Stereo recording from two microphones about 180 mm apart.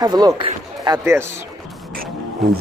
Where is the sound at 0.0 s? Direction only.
20° right (ahead or behind).